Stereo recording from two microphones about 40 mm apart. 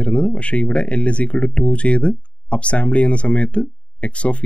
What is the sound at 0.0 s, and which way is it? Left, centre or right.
Speech, left.